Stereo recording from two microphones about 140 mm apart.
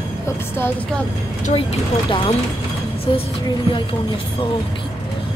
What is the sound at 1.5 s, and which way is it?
Speech, 45° left (ahead or behind).